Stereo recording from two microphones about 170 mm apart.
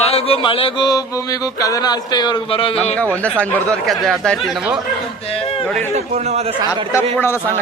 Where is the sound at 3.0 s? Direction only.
10° left (ahead or behind).